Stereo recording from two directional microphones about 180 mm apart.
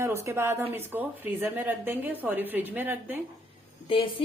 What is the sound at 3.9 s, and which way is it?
Speech, 30° left (ahead or behind).